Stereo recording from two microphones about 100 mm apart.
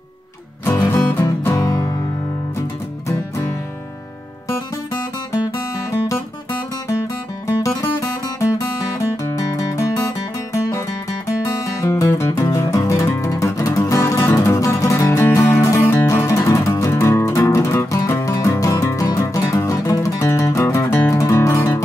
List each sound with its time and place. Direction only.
0.7 s music: 20° left (ahead or behind)
1.5 s music: 40° left (ahead or behind)
3.1 s music: 30° left (ahead or behind)
8.0 s music: 30° left (ahead or behind)
16.1 s music: 30° left (ahead or behind)